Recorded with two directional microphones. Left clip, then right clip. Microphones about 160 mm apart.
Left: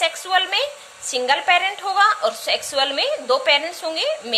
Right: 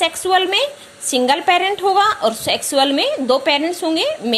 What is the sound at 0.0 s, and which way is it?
A woman's voice, 20° right (ahead or behind).